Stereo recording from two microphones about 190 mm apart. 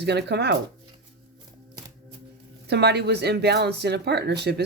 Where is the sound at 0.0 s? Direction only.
60° right (ahead or behind).